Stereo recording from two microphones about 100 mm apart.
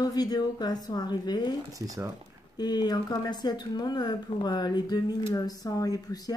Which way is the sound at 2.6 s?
45° left (ahead or behind).